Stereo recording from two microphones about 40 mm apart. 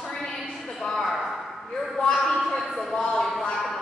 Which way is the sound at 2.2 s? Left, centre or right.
Centre.